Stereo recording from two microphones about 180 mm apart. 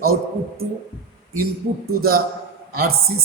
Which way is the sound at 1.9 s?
55° right (ahead or behind).